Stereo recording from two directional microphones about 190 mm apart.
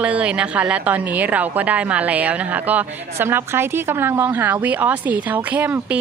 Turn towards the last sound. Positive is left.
turn(degrees=-5)  # may be behind; listen again after turning